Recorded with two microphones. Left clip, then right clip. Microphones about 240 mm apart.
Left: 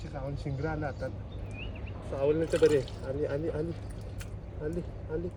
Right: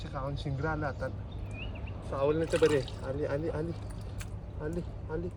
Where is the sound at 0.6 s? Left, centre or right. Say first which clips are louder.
Right 1 dB; right.